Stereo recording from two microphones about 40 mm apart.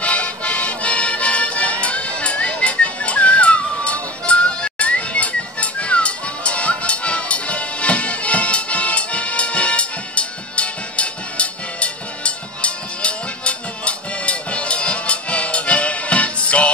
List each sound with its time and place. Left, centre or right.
0.0 s music: left